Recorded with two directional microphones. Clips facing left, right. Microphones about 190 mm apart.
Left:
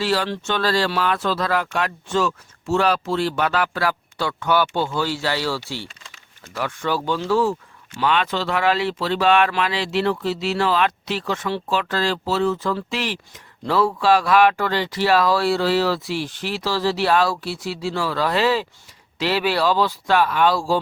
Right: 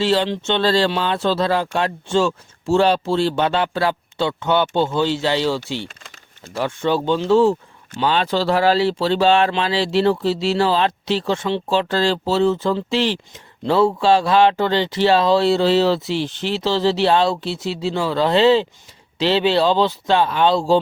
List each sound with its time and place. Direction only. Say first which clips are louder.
0.0 s speech: right 4 dB; 25° right (ahead or behind)